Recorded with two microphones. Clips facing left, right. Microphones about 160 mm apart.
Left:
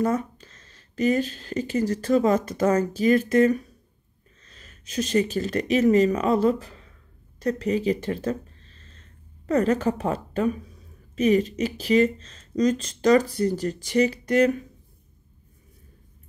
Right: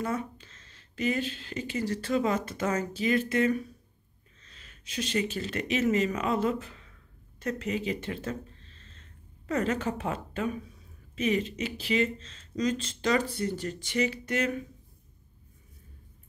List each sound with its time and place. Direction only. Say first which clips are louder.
0.0 s speech: left 8 dB; 40° left (ahead or behind)